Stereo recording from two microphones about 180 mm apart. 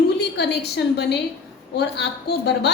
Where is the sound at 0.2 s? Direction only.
70° left (ahead or behind).